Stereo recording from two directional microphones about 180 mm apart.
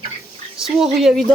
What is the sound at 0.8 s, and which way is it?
Speech, centre (ahead or behind).